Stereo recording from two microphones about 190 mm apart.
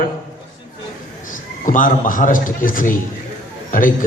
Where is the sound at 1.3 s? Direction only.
45° left (ahead or behind).